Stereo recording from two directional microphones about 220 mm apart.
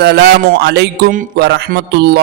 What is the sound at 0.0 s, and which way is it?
A man's voice, 50° right (ahead or behind).